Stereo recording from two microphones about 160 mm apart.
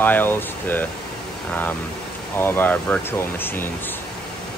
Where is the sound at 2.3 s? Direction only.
15° left (ahead or behind).